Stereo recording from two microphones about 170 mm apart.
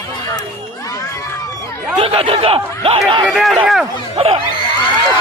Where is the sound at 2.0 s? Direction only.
35° right (ahead or behind).